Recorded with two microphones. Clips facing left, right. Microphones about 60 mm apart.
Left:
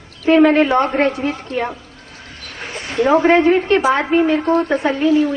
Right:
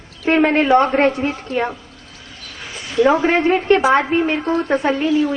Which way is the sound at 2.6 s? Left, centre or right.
Left.